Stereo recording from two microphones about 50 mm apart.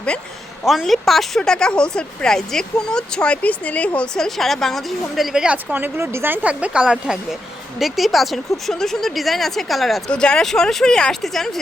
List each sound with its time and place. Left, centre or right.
0.6 s speech: centre
1.4 s speech: centre
3.4 s speech: left
4.1 s speech: centre
5.3 s speech: centre
6.0 s speech: right
6.4 s speech: right
6.8 s speech: centre
10.1 s speech: centre